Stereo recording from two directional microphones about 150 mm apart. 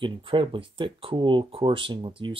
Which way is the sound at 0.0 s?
35° right (ahead or behind).